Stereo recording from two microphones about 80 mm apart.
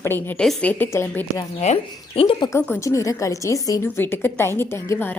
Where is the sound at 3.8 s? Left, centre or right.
Left.